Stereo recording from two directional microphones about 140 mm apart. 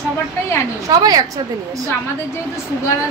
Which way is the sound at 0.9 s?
25° right (ahead or behind).